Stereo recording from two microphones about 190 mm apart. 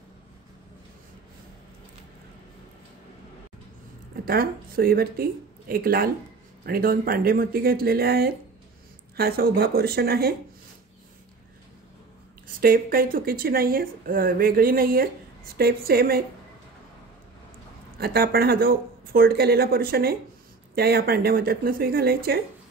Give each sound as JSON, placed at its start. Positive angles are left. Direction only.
{"t": 4.3, "sound": "speech", "side_deg": -50}
{"t": 12.5, "sound": "speech", "side_deg": -50}
{"t": 17.9, "sound": "speech", "side_deg": -55}